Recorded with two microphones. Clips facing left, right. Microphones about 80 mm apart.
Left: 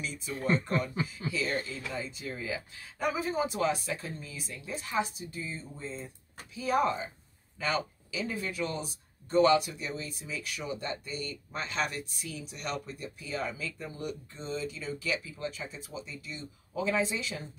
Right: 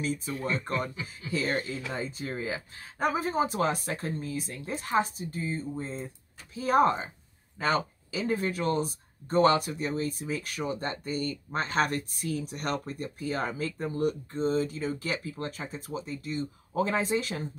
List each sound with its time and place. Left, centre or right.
0.0 s speech: right